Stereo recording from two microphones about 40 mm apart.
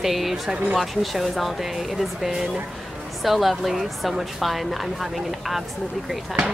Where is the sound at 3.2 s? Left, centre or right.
Centre.